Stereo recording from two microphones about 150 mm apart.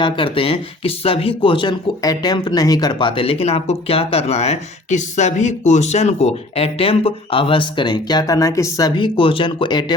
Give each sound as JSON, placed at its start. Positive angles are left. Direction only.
{"t": 0.0, "sound": "speech", "side_deg": 35}
{"t": 9.0, "sound": "speech", "side_deg": 35}